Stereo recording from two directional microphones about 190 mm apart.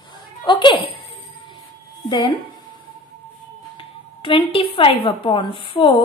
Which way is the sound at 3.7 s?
25° left (ahead or behind).